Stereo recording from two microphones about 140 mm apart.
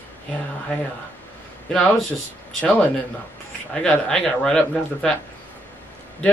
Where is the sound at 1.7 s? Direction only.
5° left (ahead or behind).